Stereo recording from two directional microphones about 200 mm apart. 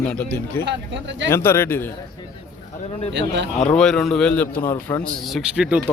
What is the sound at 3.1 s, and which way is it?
Speech, 60° right (ahead or behind).